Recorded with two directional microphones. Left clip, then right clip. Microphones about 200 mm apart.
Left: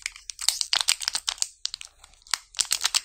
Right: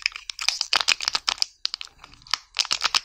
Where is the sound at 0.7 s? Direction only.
25° right (ahead or behind).